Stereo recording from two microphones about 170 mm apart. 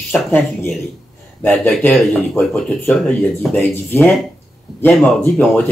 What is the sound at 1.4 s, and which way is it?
Speech, 10° left (ahead or behind).